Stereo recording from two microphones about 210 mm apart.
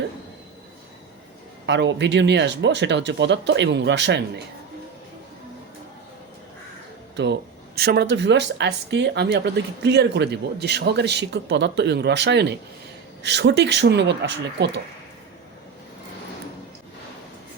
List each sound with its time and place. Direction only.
1.6 s speech: 55° right (ahead or behind)
7.8 s speech: 50° right (ahead or behind)